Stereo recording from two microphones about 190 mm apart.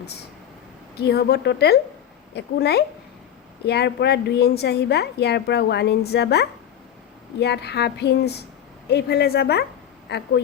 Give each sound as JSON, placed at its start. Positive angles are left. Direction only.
{"t": 0.9, "sound": "a woman's voice", "side_deg": 55}